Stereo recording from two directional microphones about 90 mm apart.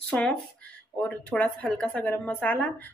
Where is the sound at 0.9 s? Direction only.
10° left (ahead or behind).